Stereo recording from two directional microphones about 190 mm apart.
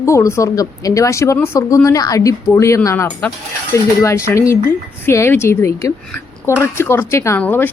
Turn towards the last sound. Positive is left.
turn(degrees=10)  # may be behind; listen again after turning